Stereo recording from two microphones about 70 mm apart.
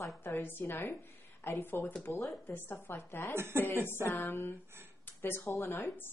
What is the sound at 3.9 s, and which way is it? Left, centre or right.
A woman's voice, left.